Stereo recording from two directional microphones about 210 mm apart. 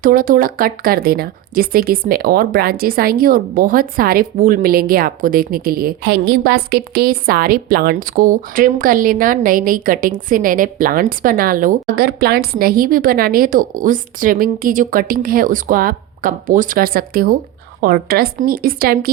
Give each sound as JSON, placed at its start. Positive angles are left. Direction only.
{"t": 0.0, "sound": "speech", "side_deg": -40}